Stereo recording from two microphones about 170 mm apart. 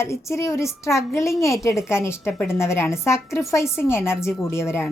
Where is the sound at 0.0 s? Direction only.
15° left (ahead or behind).